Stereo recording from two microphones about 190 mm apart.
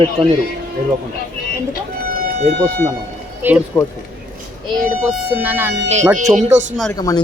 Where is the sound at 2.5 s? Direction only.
50° right (ahead or behind).